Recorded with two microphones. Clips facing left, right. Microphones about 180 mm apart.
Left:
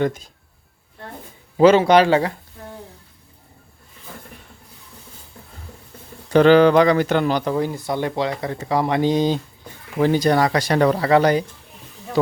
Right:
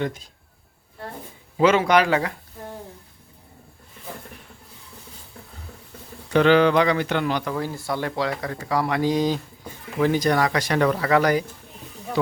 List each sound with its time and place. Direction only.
0.0 s speech: 45° left (ahead or behind)
1.5 s speech: 35° left (ahead or behind)
6.3 s speech: 40° left (ahead or behind)
7.5 s speech: 20° left (ahead or behind)
12.2 s speech: 40° left (ahead or behind)